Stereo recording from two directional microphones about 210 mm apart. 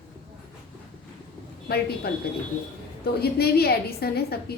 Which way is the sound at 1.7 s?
50° left (ahead or behind).